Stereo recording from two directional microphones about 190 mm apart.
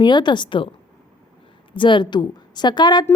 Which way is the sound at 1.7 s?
25° left (ahead or behind).